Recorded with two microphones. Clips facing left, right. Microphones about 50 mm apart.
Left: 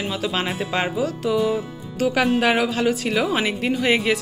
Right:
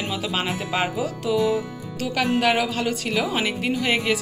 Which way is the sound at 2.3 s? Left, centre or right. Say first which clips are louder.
Left 2 dB; centre.